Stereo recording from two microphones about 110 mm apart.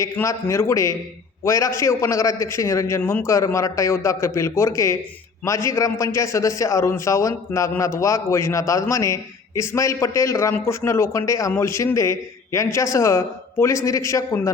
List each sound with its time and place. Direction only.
0.0 s a man's voice: 25° left (ahead or behind)
3.2 s a man's voice: 30° left (ahead or behind)